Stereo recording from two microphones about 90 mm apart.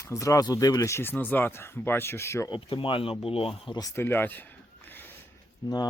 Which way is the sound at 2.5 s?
70° left (ahead or behind).